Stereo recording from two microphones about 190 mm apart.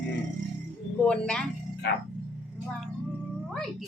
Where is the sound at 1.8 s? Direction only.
65° left (ahead or behind).